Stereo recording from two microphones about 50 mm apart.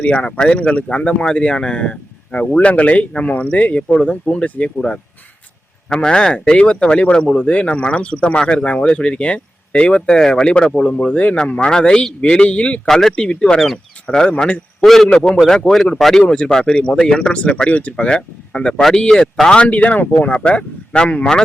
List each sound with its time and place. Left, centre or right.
0.0 s speech: left
5.9 s speech: centre
8.4 s speech: centre
12.9 s speech: centre
13.1 s speech: left
14.8 s speech: centre
15.1 s speech: centre
16.3 s speech: centre
16.9 s speech: centre
17.3 s speech: left
18.8 s speech: centre
19.6 s speech: left